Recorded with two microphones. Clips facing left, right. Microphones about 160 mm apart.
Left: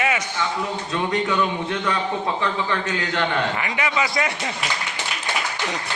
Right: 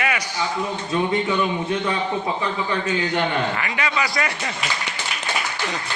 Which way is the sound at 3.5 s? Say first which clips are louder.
Left 1 dB; 20° left (ahead or behind).